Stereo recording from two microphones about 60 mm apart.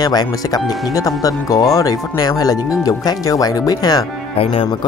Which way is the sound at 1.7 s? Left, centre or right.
Left.